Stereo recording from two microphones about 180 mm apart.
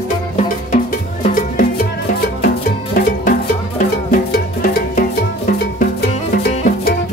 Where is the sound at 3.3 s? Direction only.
50° left (ahead or behind).